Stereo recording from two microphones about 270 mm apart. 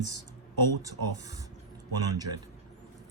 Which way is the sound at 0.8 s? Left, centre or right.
Centre.